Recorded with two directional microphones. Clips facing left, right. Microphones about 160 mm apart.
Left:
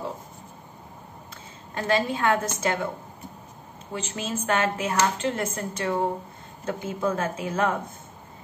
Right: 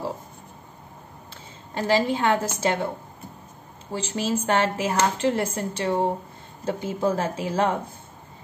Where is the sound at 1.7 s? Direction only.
25° right (ahead or behind).